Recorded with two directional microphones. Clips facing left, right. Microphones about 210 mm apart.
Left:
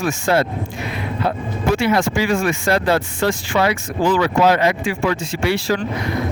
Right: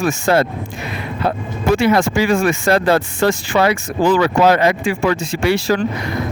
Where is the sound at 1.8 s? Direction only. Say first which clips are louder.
Right 4 dB; 45° right (ahead or behind).